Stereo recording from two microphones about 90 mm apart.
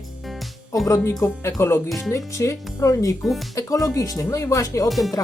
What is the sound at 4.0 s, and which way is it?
Speech, 35° left (ahead or behind).